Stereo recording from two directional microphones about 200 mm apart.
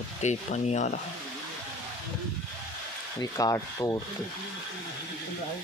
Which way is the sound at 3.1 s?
20° left (ahead or behind).